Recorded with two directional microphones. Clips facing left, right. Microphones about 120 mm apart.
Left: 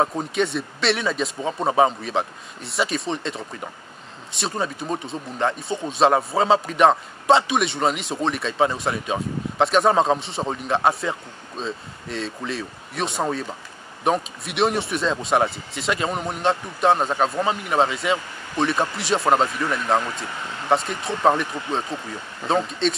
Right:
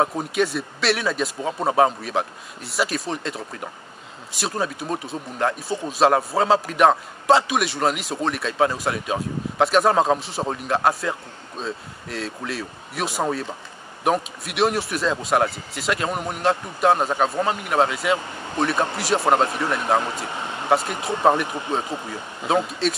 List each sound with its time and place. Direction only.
0.0 s speech: 5° right (ahead or behind)
20.0 s speech: 25° right (ahead or behind)
20.7 s speech: 5° right (ahead or behind)
22.5 s speech: 5° right (ahead or behind)